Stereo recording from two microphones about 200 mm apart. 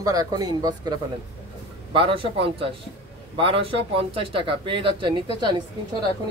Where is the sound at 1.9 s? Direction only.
25° right (ahead or behind).